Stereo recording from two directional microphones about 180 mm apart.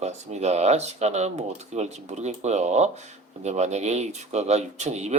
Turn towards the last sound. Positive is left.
turn(degrees=-40)  # may be behind; listen again after turning